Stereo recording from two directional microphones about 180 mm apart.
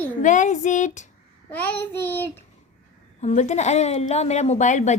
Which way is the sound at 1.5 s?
10° left (ahead or behind).